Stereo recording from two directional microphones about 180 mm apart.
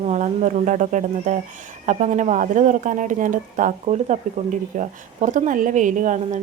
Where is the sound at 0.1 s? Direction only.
40° right (ahead or behind).